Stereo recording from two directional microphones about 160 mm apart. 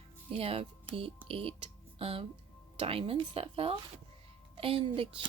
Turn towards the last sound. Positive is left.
turn(degrees=-35)  # may be behind; listen again after turning